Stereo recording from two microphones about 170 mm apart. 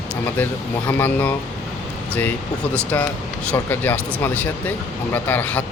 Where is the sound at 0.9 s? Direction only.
10° left (ahead or behind).